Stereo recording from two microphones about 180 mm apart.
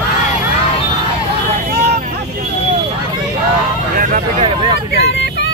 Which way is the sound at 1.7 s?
65° right (ahead or behind).